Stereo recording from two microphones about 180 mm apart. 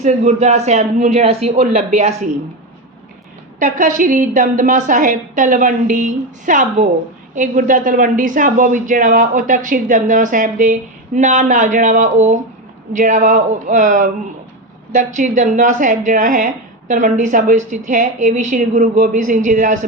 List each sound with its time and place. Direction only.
0.0 s speech: 40° right (ahead or behind)
3.6 s speech: 45° right (ahead or behind)